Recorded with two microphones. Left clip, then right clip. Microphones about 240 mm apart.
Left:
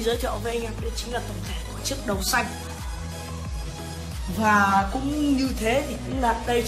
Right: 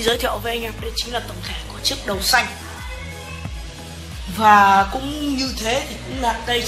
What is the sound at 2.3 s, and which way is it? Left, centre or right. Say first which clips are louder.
Speech: right 7 dB; right.